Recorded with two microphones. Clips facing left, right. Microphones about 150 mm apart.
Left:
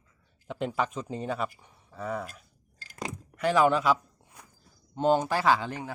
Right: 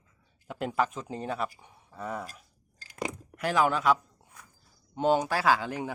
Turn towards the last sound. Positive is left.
turn(degrees=-5)  # may be behind; listen again after turning